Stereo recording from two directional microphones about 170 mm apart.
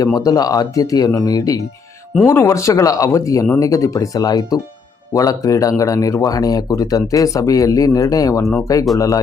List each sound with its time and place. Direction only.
0.0 s speech: 20° left (ahead or behind)